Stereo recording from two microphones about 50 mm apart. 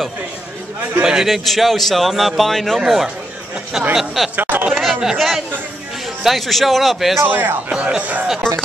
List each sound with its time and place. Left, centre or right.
1.0 s a man's voice: centre
4.4 s a sound: right
5.0 s a man's voice: centre
7.2 s speech: right
7.7 s speech: right
8.4 s speech: centre